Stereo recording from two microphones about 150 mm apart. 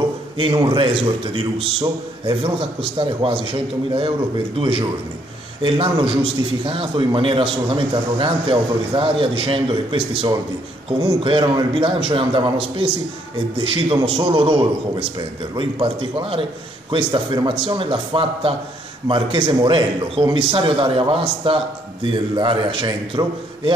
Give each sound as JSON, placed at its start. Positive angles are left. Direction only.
{"t": 0.4, "sound": "a man's voice", "side_deg": -35}
{"t": 5.9, "sound": "a man's voice", "side_deg": -35}